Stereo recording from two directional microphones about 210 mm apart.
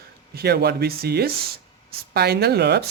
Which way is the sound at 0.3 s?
50° right (ahead or behind).